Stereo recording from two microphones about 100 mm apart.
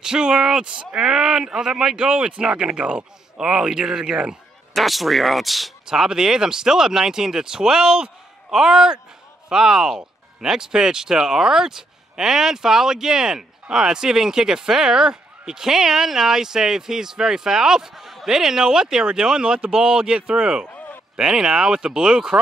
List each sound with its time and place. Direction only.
0.0 s speech: 5° right (ahead or behind)
20.6 s a sound: 20° left (ahead or behind)
21.2 s speech: 5° right (ahead or behind)